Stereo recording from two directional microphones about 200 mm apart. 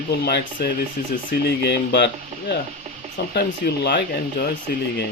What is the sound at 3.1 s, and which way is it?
Speech, 55° left (ahead or behind).